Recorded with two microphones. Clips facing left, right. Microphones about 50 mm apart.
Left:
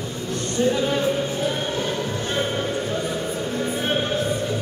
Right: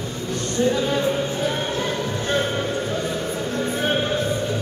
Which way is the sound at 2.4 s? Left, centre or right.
Centre.